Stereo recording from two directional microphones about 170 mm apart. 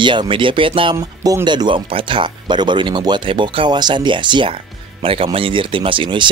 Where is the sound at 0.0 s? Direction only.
30° right (ahead or behind).